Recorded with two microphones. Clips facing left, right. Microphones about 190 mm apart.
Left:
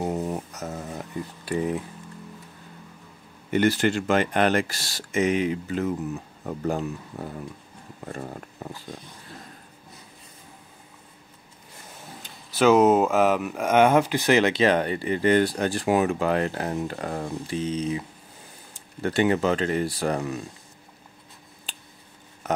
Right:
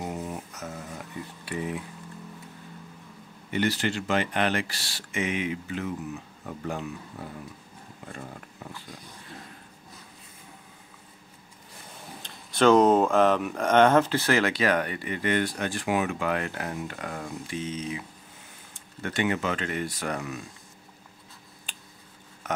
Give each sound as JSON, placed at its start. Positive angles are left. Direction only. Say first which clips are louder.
{"t": 0.0, "sound": "a sound", "louder": "left 6 dB", "side_deg": 40}
{"t": 1.4, "sound": "speech", "louder": "left 6 dB", "side_deg": 40}
{"t": 3.5, "sound": "speech", "louder": "left 6 dB", "side_deg": 50}
{"t": 12.2, "sound": "speech", "louder": "left 1 dB", "side_deg": 5}
{"t": 21.7, "sound": "finger snapping", "louder": "left 3 dB", "side_deg": 35}